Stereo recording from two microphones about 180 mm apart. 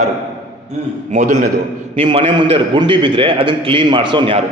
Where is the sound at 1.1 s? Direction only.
45° right (ahead or behind).